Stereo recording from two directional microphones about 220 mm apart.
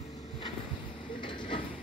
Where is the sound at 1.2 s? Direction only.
20° left (ahead or behind).